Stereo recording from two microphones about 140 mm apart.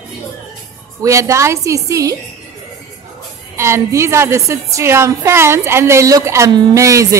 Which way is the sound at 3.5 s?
20° right (ahead or behind).